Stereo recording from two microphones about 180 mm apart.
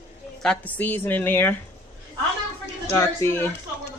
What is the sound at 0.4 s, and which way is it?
Speech, 5° left (ahead or behind).